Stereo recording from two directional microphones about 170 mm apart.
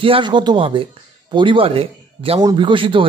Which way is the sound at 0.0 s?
30° right (ahead or behind).